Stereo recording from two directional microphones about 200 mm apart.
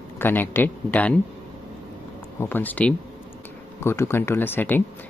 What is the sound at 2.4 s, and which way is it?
Speech, 10° left (ahead or behind).